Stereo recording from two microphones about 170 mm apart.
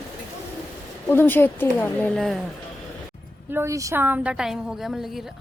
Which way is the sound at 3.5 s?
20° right (ahead or behind).